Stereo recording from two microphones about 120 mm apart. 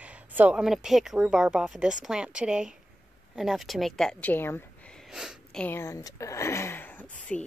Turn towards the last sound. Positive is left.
turn(degrees=10)  # may be behind; listen again after turning